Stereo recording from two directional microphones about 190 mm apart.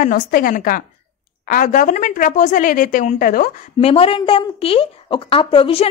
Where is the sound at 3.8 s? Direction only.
30° left (ahead or behind).